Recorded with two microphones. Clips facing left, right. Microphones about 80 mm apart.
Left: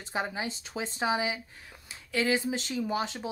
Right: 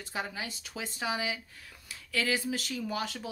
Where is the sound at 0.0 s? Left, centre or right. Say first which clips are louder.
Left 4 dB; left.